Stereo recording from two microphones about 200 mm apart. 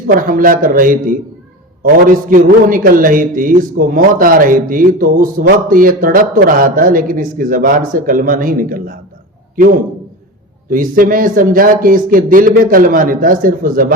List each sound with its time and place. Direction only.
0.1 s speech: 45° right (ahead or behind)
2.3 s speech: 45° right (ahead or behind)
10.7 s speech: 45° right (ahead or behind)